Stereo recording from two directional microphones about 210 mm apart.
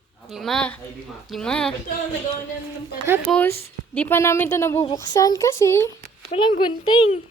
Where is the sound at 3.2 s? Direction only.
5° left (ahead or behind).